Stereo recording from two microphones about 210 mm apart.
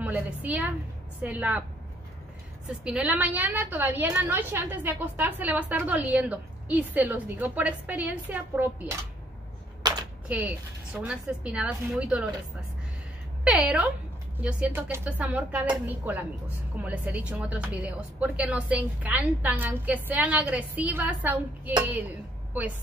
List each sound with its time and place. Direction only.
0.0 s a woman's voice: 5° right (ahead or behind)
2.8 s a woman's voice: 5° right (ahead or behind)
9.8 s a sound: 20° right (ahead or behind)
10.2 s speech: 5° right (ahead or behind)
13.4 s a woman's voice: 5° right (ahead or behind)